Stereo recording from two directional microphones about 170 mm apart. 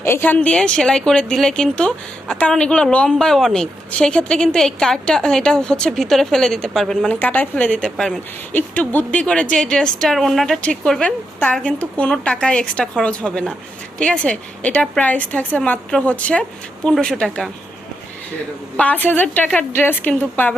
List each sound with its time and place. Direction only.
0.0 s a woman's voice: 15° left (ahead or behind)
18.8 s a woman's voice: 10° left (ahead or behind)